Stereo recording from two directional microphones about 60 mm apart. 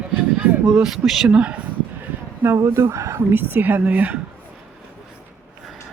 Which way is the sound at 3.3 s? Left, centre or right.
Right.